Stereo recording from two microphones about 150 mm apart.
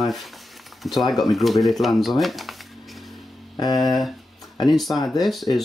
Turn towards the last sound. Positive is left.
turn(degrees=0)  # may be behind; listen again after turning